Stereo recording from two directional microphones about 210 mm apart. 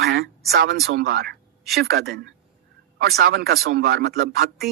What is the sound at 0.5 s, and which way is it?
Speech, 50° right (ahead or behind).